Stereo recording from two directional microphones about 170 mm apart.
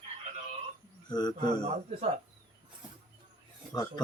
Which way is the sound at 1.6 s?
40° right (ahead or behind).